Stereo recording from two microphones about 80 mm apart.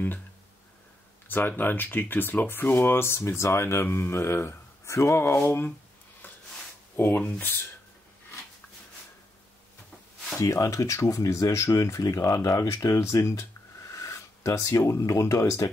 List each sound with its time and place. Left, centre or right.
1.6 s speech: left
6.2 s a sound: left
7.0 s speech: left
10.4 s speech: left